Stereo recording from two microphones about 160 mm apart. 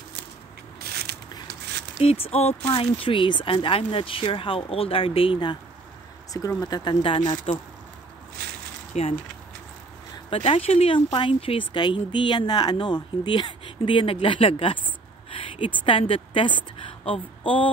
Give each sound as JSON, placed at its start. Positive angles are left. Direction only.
{"t": 0.7, "sound": "a sound", "side_deg": -90}
{"t": 2.0, "sound": "speech", "side_deg": 40}
{"t": 6.3, "sound": "speech", "side_deg": 20}
{"t": 8.9, "sound": "speech", "side_deg": 45}
{"t": 10.3, "sound": "speech", "side_deg": 35}
{"t": 17.0, "sound": "a sound", "side_deg": 35}